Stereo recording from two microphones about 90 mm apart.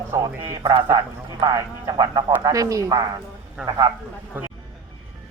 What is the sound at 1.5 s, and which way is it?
A man's voice, 45° right (ahead or behind).